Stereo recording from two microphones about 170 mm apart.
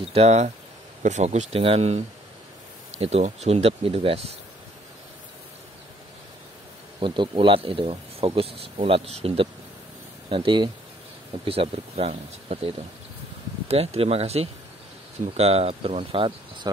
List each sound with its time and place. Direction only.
0.1 s speech: 40° right (ahead or behind)
3.0 s speech: 35° right (ahead or behind)
7.0 s speech: 30° right (ahead or behind)